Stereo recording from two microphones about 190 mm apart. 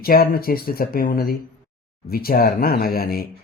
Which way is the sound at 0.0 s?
50° left (ahead or behind).